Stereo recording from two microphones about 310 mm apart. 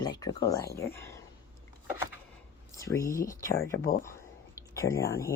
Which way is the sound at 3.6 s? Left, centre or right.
Left.